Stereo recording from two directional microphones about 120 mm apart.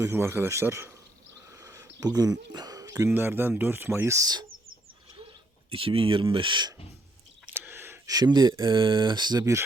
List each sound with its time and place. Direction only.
0.0 s speech: 20° right (ahead or behind)
1.6 s a sound: 30° right (ahead or behind)
2.8 s speech: 20° right (ahead or behind)
5.7 s speech: 50° right (ahead or behind)
7.7 s a sound: 15° right (ahead or behind)
8.0 s speech: 35° right (ahead or behind)